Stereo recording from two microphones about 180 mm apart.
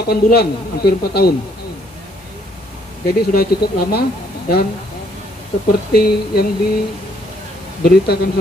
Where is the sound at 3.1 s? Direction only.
60° left (ahead or behind).